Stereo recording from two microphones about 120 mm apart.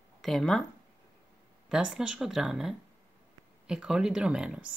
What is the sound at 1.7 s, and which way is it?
Speech, 5° right (ahead or behind).